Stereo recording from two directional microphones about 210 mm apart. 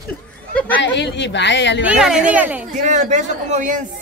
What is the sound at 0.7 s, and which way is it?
Speech, 55° left (ahead or behind).